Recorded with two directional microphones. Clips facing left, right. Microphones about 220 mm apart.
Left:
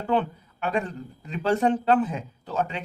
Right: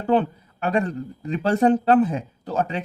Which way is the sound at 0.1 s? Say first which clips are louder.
Right 5 dB; 40° right (ahead or behind).